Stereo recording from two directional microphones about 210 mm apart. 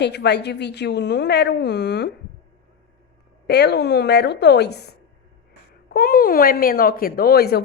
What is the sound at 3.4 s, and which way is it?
Speech, 50° left (ahead or behind).